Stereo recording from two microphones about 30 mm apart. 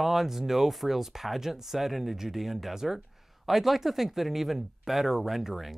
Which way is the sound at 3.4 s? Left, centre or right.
Centre.